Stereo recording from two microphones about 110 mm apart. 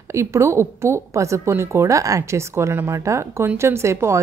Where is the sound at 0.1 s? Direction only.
25° right (ahead or behind).